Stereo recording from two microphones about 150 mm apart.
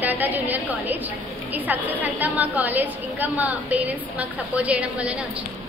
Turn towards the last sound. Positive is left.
turn(degrees=-10)  # may be behind; listen again after turning